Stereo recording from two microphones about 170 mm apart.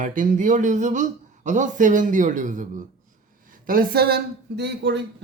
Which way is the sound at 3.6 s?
60° right (ahead or behind).